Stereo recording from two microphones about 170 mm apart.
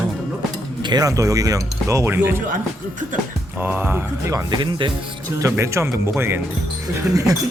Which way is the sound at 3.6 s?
10° right (ahead or behind).